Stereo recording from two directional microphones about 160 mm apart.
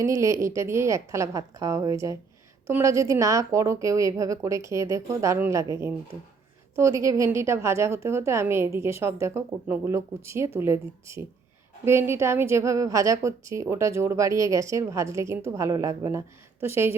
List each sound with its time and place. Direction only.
0.0 s a woman's voice: 20° right (ahead or behind)
7.0 s a woman's voice: 20° right (ahead or behind)